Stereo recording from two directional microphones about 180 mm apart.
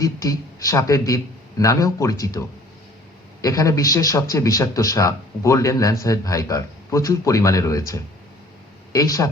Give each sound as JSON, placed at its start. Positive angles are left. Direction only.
{"t": 0.0, "sound": "a man's voice", "side_deg": 20}
{"t": 3.4, "sound": "a man's voice", "side_deg": 20}